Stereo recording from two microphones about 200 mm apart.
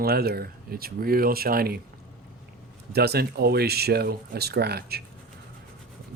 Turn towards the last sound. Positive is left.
turn(degrees=-50)  # may be behind; listen again after turning